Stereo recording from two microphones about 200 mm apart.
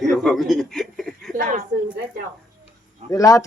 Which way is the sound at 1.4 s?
40° right (ahead or behind).